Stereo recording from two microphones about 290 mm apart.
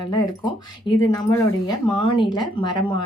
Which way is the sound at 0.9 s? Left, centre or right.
Centre.